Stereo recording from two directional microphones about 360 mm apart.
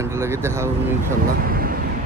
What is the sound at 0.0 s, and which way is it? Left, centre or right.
Speech, centre.